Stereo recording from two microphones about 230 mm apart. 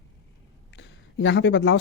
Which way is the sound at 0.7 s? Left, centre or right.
Left.